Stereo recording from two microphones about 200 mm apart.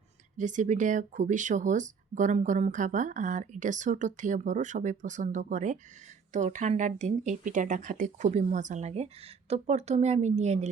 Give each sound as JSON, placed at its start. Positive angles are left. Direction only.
{"t": 0.3, "sound": "speech", "side_deg": -40}